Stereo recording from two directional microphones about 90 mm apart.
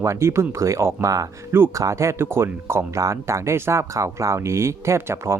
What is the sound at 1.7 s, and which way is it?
Speech, 35° right (ahead or behind).